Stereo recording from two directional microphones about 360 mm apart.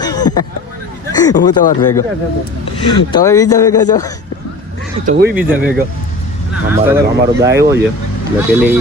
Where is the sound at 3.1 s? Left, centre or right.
Centre.